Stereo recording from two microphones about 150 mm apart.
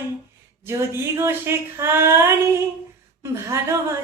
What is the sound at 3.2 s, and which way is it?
Speech, 20° right (ahead or behind).